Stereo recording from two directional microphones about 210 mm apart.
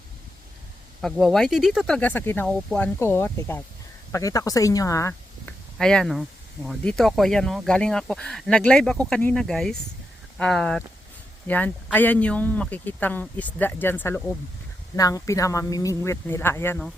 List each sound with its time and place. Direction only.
1.0 s speech: centre (ahead or behind)
5.7 s speech: 5° left (ahead or behind)